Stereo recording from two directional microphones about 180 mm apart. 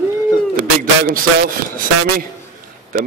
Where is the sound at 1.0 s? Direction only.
50° right (ahead or behind).